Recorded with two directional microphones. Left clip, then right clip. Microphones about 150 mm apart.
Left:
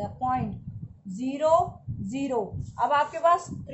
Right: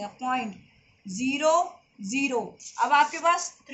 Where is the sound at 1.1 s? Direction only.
70° left (ahead or behind).